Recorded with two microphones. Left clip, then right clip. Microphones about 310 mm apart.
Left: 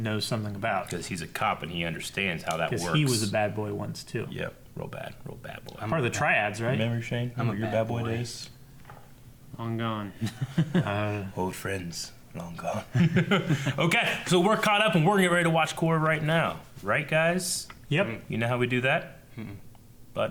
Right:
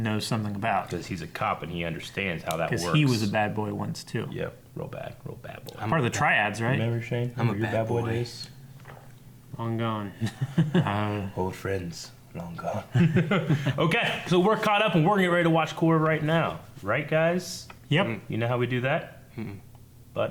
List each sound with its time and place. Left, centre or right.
0.0 s speech: centre
0.9 s a man's voice: right
2.6 s speech: centre
4.3 s a man's voice: right
5.9 s speech: centre
6.7 s speech: right
7.3 s speech: left
7.8 s speech: right
9.6 s a man's voice: right
10.8 s speech: centre
11.3 s a man's voice: right
19.4 s speech: left
20.1 s a man's voice: right